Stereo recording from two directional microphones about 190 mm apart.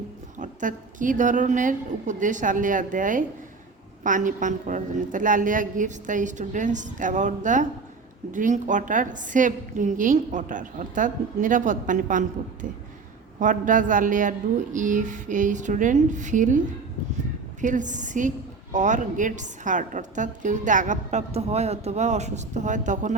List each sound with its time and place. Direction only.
0.3 s a woman's voice: 40° right (ahead or behind)
13.4 s a woman's voice: 45° right (ahead or behind)
17.6 s a woman's voice: 40° right (ahead or behind)